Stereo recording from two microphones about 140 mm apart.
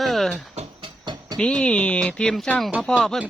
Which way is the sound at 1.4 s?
5° left (ahead or behind).